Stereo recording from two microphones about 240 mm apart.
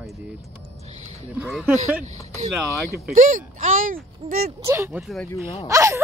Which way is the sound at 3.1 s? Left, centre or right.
Right.